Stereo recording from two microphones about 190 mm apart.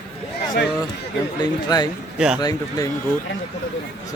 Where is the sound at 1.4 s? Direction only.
20° left (ahead or behind).